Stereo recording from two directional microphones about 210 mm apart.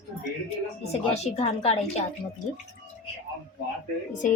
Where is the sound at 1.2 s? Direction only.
30° left (ahead or behind).